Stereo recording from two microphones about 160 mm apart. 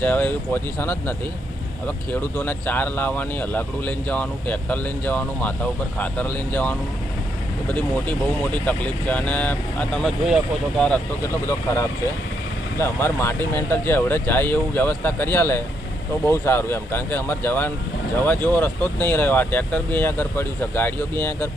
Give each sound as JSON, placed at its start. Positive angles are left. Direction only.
{"t": 0.0, "sound": "speech", "side_deg": 10}
{"t": 2.3, "sound": "speech", "side_deg": 10}
{"t": 11.4, "sound": "speech", "side_deg": 20}